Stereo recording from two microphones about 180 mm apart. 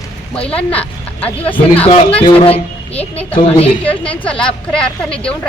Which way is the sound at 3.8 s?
10° left (ahead or behind).